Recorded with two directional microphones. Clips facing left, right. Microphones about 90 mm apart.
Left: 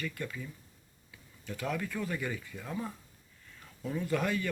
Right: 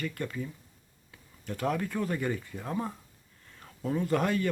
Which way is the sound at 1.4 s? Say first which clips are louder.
Right 5 dB; 45° right (ahead or behind).